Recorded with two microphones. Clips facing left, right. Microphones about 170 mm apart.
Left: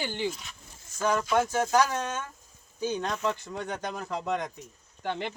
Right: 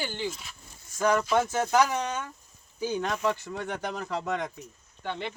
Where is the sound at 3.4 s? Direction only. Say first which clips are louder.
Right 1 dB; 15° left (ahead or behind).